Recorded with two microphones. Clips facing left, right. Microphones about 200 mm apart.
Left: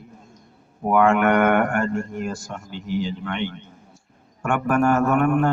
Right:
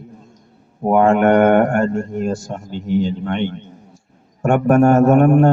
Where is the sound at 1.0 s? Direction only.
40° right (ahead or behind).